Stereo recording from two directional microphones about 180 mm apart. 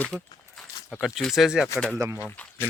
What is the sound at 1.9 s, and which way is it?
Speech, 15° right (ahead or behind).